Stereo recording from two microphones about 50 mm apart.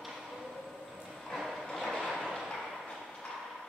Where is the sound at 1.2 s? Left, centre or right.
Centre.